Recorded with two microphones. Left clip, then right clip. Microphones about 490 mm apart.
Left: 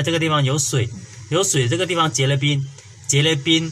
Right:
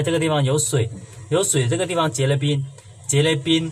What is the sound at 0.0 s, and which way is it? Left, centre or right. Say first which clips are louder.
Speech: left 1 dB; right.